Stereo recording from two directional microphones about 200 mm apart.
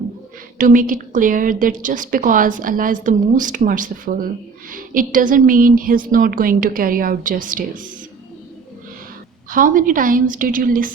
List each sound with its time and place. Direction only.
0.6 s a woman's voice: 40° right (ahead or behind)
9.5 s a woman's voice: 45° right (ahead or behind)